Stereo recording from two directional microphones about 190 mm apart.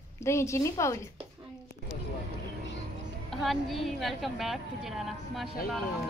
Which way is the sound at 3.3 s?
Centre (ahead or behind).